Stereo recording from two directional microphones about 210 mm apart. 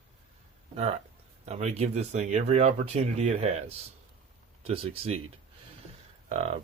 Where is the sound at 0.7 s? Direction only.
30° right (ahead or behind).